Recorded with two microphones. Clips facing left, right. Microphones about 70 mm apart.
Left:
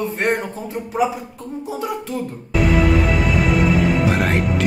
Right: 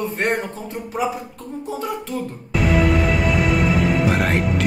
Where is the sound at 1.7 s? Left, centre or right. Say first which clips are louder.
Left 1 dB; centre.